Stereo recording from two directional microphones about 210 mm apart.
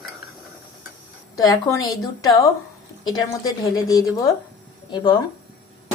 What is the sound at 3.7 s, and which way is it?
A woman's voice, 20° left (ahead or behind).